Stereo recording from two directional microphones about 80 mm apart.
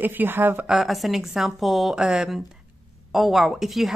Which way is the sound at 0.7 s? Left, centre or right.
Centre.